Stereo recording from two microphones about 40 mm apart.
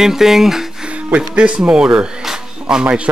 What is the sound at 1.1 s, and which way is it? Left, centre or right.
Speech, right.